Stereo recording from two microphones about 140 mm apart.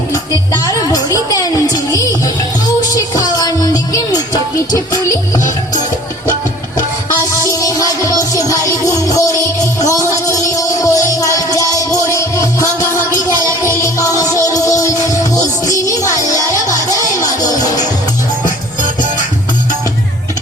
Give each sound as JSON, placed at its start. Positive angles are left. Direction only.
{"t": 0.1, "sound": "music", "side_deg": 25}
{"t": 7.4, "sound": "music", "side_deg": 25}
{"t": 12.9, "sound": "music", "side_deg": 70}
{"t": 13.6, "sound": "music", "side_deg": 20}
{"t": 16.9, "sound": "music", "side_deg": 25}